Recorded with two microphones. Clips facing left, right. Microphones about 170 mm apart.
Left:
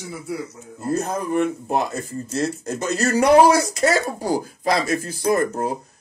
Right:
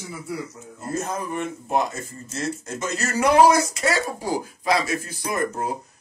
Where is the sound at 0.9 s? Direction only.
35° left (ahead or behind).